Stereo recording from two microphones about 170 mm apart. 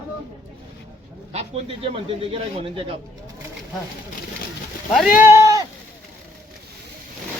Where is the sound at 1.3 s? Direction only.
35° right (ahead or behind).